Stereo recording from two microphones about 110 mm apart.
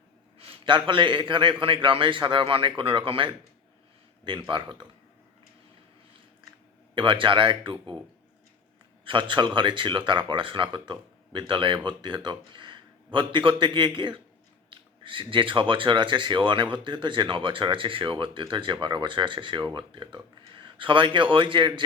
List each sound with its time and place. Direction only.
0.3 s a man's voice: 55° right (ahead or behind)
6.9 s a man's voice: 50° right (ahead or behind)
9.0 s a man's voice: 50° right (ahead or behind)